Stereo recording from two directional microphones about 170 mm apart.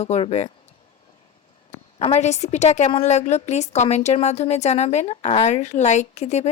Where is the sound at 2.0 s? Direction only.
40° left (ahead or behind).